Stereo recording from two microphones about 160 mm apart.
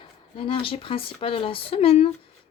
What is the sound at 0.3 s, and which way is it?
Speech, 35° left (ahead or behind).